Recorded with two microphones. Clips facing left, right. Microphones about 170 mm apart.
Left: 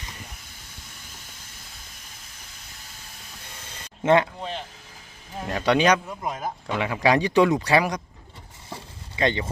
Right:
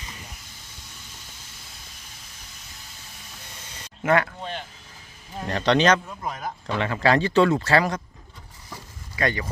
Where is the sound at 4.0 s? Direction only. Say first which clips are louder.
Left 2 dB; 25° left (ahead or behind).